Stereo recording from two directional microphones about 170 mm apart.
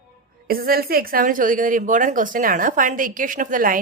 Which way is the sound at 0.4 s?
60° right (ahead or behind).